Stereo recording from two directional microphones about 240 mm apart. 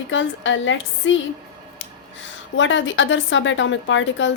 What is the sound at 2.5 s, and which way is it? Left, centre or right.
A woman's voice, left.